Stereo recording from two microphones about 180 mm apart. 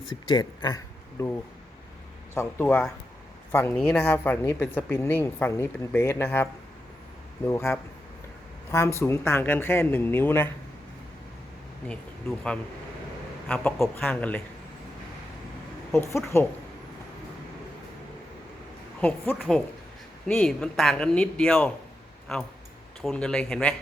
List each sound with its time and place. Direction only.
0.1 s speech: 25° left (ahead or behind)
13.5 s speech: 10° left (ahead or behind)
15.9 s speech: 15° left (ahead or behind)
19.0 s a man's voice: 10° left (ahead or behind)